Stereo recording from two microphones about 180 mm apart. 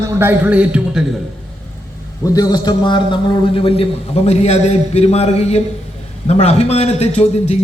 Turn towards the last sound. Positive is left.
turn(degrees=35)  # may be behind; listen again after turning